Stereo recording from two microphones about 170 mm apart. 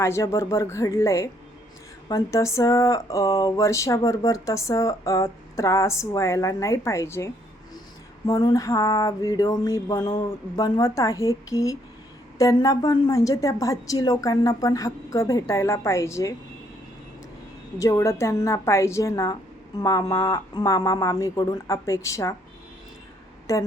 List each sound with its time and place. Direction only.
0.0 s speech: 15° left (ahead or behind)
8.3 s a woman's voice: 20° left (ahead or behind)
17.7 s a woman's voice: 20° left (ahead or behind)
23.5 s speech: 15° left (ahead or behind)